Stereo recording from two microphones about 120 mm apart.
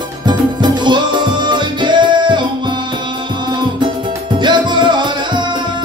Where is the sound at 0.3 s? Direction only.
40° right (ahead or behind).